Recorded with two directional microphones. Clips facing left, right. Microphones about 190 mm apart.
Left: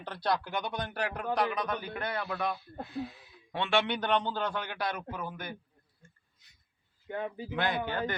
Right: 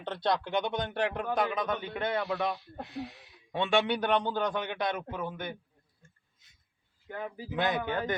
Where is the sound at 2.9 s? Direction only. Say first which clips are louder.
Left 2 dB; 70° right (ahead or behind).